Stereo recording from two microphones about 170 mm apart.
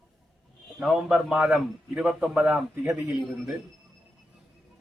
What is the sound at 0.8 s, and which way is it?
A man's voice, 5° right (ahead or behind).